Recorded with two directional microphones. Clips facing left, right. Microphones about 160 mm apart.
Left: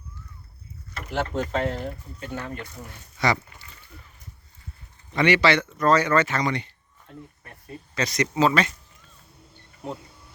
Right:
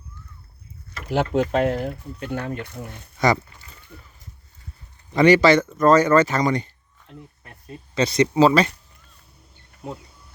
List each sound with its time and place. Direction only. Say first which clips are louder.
1.3 s speech: right 7 dB; 65° right (ahead or behind)
3.9 s a sound: right 5 dB; 60° right (ahead or behind)
5.1 s speech: right 6 dB; 40° right (ahead or behind)
7.9 s speech: right 6 dB; 30° right (ahead or behind)